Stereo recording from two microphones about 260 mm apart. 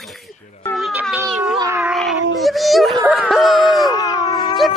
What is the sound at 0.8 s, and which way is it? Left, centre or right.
Cat, centre.